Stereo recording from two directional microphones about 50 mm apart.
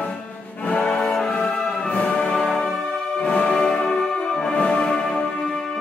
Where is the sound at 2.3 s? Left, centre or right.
Centre.